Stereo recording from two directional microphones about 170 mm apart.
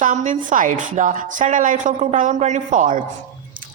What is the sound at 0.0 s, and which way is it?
A woman's voice, 50° right (ahead or behind).